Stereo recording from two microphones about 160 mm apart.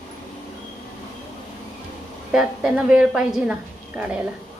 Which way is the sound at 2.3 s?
5° right (ahead or behind).